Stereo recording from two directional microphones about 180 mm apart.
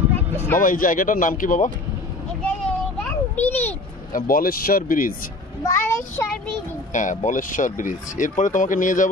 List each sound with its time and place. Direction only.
0.6 s speech: 50° left (ahead or behind)
2.4 s children playing: 5° left (ahead or behind)
4.1 s speech: 50° left (ahead or behind)
5.6 s a child's voice: 15° left (ahead or behind)
6.9 s speech: 45° left (ahead or behind)